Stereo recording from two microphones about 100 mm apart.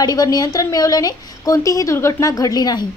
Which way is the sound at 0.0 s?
40° left (ahead or behind).